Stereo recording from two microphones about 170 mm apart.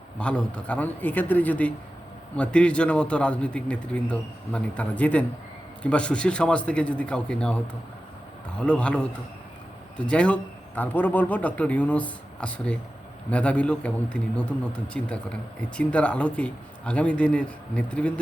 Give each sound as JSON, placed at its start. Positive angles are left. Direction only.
{"t": 0.2, "sound": "a man's voice", "side_deg": 5}